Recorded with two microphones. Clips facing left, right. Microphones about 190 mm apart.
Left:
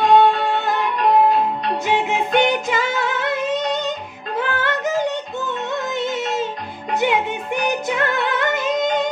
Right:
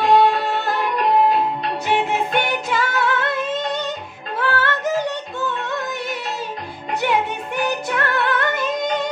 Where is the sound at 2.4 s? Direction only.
15° left (ahead or behind).